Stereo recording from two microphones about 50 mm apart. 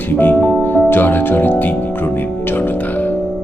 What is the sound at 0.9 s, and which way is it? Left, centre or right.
Music, left.